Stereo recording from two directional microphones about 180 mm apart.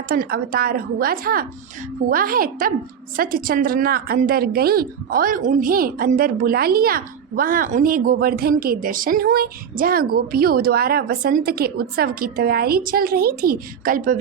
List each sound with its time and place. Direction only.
0.1 s a woman's voice: 50° right (ahead or behind)